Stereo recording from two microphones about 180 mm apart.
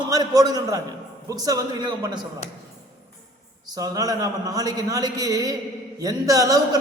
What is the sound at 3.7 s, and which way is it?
A man's voice, 20° right (ahead or behind).